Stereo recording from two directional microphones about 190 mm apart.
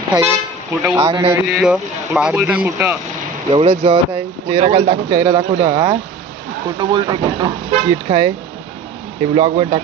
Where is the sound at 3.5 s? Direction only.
30° right (ahead or behind).